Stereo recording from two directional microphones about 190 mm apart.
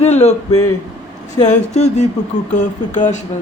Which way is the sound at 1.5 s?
35° left (ahead or behind).